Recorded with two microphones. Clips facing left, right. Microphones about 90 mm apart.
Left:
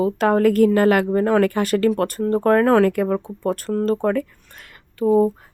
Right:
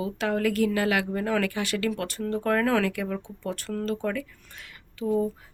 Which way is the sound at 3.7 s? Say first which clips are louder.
Left 9 dB; 30° left (ahead or behind).